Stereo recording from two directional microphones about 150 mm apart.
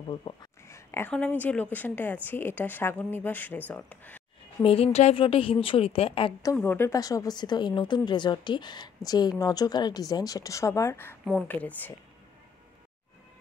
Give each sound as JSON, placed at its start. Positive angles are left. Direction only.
{"t": 0.1, "sound": "a woman's voice", "side_deg": 30}
{"t": 0.7, "sound": "a sound", "side_deg": 20}
{"t": 1.1, "sound": "a woman's voice", "side_deg": 10}
{"t": 4.6, "sound": "a woman's voice", "side_deg": 40}
{"t": 6.5, "sound": "a woman's voice", "side_deg": 10}